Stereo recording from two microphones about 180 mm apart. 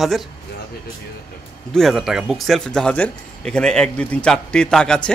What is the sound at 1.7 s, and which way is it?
Speech, centre (ahead or behind).